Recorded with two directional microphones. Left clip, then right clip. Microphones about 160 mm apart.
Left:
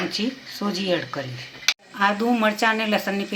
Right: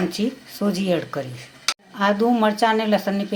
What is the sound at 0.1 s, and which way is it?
Speech, 65° right (ahead or behind).